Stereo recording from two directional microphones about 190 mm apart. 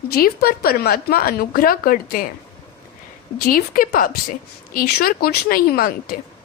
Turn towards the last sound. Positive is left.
turn(degrees=50)  # may be behind; listen again after turning